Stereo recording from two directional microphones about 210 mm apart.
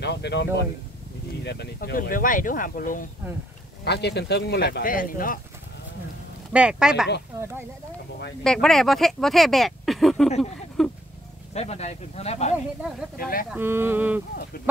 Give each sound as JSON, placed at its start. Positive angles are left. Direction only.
{"t": 0.0, "sound": "speech", "side_deg": 55}
{"t": 3.8, "sound": "speech", "side_deg": 50}
{"t": 6.5, "sound": "speech", "side_deg": -5}
{"t": 8.5, "sound": "speech", "side_deg": 0}
{"t": 10.8, "sound": "a sound", "side_deg": 0}
{"t": 11.5, "sound": "speech", "side_deg": 30}
{"t": 13.2, "sound": "speech", "side_deg": 45}
{"t": 13.5, "sound": "speech", "side_deg": -10}